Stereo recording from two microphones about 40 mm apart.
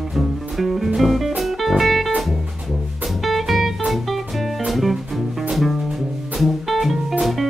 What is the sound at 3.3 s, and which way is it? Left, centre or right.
Music, centre.